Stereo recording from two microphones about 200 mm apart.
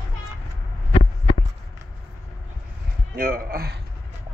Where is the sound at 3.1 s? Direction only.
45° right (ahead or behind).